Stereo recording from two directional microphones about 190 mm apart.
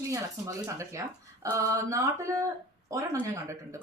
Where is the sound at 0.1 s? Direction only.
15° right (ahead or behind).